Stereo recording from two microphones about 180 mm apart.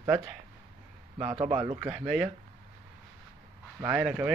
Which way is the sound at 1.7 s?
5° right (ahead or behind).